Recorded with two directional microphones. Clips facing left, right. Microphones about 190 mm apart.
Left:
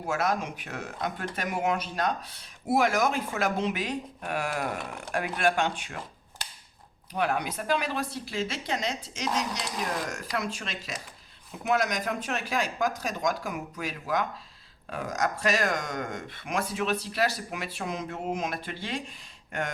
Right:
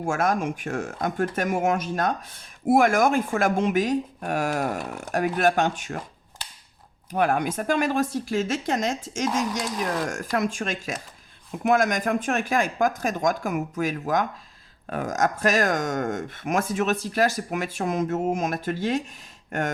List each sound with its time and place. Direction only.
0.0 s speech: 50° right (ahead or behind)
7.1 s speech: 50° right (ahead or behind)